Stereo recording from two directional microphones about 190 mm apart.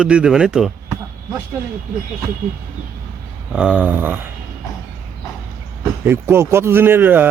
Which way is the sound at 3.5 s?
5° right (ahead or behind).